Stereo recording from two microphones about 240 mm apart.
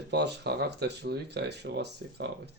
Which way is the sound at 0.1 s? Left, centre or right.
Right.